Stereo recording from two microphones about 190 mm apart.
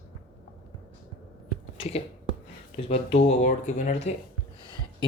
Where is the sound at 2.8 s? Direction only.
35° left (ahead or behind).